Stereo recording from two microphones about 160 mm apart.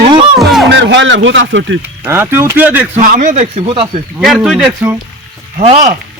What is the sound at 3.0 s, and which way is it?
Speech, 55° right (ahead or behind).